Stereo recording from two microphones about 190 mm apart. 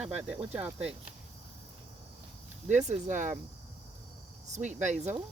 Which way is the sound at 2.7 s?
40° right (ahead or behind).